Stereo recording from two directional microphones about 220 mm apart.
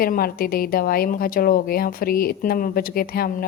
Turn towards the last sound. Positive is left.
turn(degrees=40)  # may be behind; listen again after turning